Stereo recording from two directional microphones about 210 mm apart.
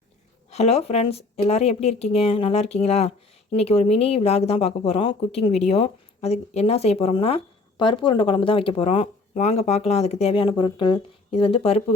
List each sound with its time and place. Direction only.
0.5 s speech: 30° left (ahead or behind)